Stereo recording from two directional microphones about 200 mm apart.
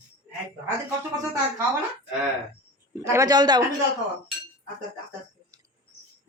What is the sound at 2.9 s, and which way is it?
Speech, 15° right (ahead or behind).